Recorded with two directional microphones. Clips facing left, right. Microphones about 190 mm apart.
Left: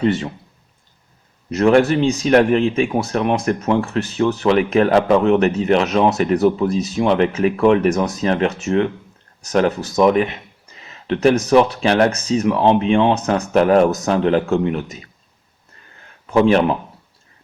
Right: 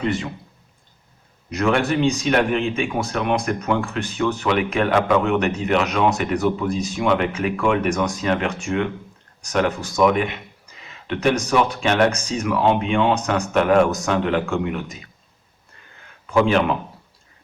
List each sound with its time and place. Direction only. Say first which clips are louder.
0.0 s speech: left 5 dB; 40° left (ahead or behind)
1.5 s speech: left 6 dB; 40° left (ahead or behind)
16.3 s speech: left 4 dB; 35° left (ahead or behind)